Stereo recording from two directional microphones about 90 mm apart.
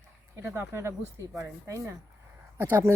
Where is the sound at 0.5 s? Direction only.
30° right (ahead or behind).